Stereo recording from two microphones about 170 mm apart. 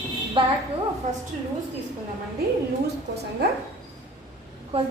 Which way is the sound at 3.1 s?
75° right (ahead or behind).